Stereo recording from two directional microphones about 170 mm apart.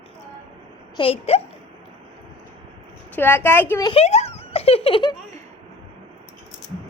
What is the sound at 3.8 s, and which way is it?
A child's voice, 35° left (ahead or behind).